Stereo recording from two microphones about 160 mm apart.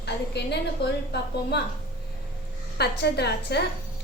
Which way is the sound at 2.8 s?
90° left.